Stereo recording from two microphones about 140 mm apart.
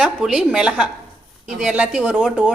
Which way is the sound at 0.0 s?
5° right (ahead or behind).